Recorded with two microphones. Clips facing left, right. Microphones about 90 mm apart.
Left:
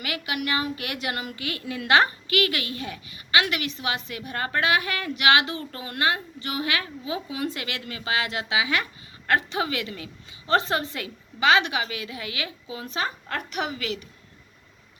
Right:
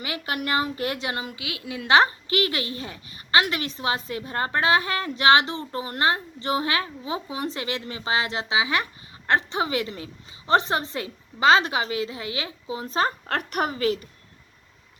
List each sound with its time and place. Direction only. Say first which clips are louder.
0.3 s a woman's voice: right 2 dB; 35° right (ahead or behind); by 1.4 s 20° right (ahead or behind)
1.4 s a woman's voice: left 2 dB; 10° right (ahead or behind); by 13.1 s 30° right (ahead or behind)
13.2 s a woman's voice: right 4 dB; 55° right (ahead or behind); by 14.0 s 40° right (ahead or behind)